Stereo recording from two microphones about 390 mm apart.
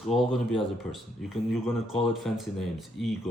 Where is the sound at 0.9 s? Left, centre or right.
Centre.